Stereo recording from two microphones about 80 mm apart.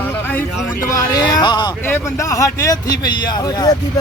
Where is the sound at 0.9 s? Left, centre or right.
Left.